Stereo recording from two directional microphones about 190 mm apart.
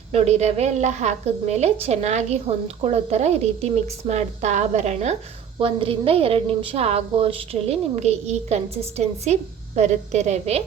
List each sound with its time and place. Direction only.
0.1 s a woman's voice: 35° right (ahead or behind)